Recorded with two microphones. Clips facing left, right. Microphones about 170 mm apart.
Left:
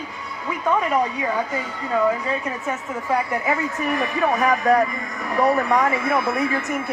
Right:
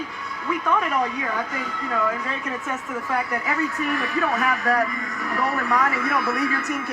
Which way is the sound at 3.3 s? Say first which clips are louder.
Left 2 dB; 20° left (ahead or behind).